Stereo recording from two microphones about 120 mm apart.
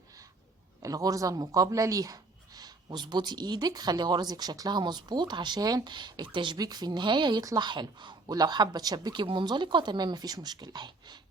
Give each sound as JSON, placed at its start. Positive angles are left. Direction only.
{"t": 0.8, "sound": "speech", "side_deg": -30}